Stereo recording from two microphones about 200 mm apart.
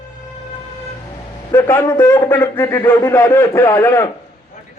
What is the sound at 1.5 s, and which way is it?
A man's voice, 15° left (ahead or behind).